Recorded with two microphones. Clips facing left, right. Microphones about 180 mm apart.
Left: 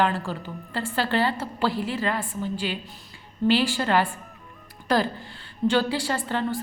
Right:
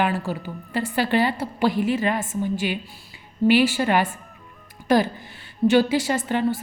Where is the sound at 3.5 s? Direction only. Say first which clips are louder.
Right 3 dB; 15° right (ahead or behind).